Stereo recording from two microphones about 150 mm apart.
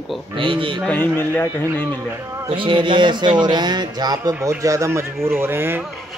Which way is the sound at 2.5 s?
35° right (ahead or behind).